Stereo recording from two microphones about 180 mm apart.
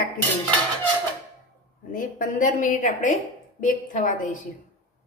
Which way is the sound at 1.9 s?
45° left (ahead or behind).